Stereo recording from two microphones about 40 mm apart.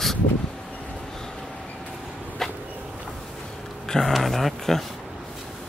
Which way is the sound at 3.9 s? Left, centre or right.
Centre.